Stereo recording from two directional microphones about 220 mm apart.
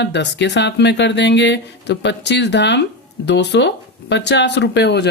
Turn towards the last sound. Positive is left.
turn(degrees=50)  # may be behind; listen again after turning